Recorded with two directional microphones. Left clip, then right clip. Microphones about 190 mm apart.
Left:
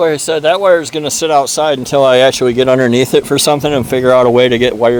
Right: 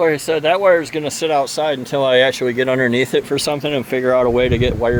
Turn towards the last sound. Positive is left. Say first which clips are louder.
# left 7 dB
turn(degrees=50)  # may be behind; listen again after turning